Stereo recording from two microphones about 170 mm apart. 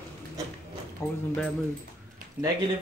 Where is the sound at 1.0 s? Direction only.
20° left (ahead or behind).